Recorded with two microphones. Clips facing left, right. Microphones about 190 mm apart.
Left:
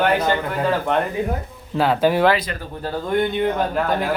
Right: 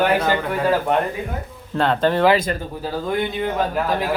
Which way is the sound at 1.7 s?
5° left (ahead or behind).